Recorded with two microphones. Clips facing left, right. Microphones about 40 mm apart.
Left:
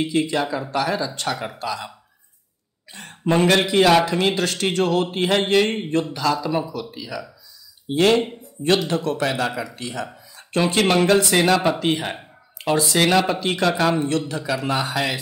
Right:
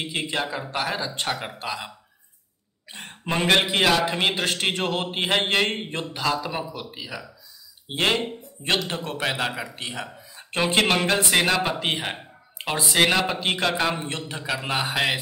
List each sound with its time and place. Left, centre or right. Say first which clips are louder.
0.0 s a man's voice: left 6 dB; right
2.9 s a sound: even; right
3.3 s a man's voice: left 4 dB; centre
10.1 s a sound: left 5 dB; right
11.1 s a man's voice: left 4 dB; right
11.4 s speech: left 5 dB; centre
12.5 s a man's voice: left 3 dB; right
13.9 s a man's voice: left 9 dB; right